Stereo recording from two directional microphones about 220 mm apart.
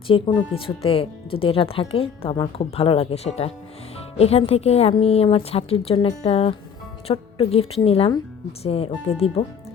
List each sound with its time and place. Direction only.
0.1 s a woman's voice: 25° left (ahead or behind)